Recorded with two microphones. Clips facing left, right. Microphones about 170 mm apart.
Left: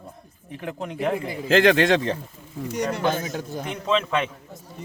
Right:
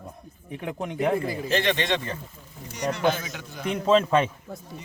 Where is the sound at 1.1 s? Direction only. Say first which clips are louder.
Right 2 dB; 15° left (ahead or behind).